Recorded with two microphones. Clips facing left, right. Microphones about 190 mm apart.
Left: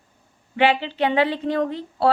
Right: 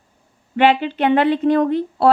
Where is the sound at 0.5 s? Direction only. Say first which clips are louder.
Right 4 dB; 55° right (ahead or behind).